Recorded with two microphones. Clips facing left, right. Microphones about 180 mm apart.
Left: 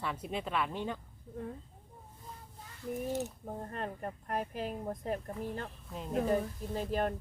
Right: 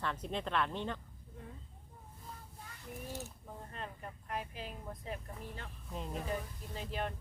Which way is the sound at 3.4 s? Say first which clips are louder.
Left 7 dB; 45° left (ahead or behind).